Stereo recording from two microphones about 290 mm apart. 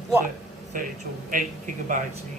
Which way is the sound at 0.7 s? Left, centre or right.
Right.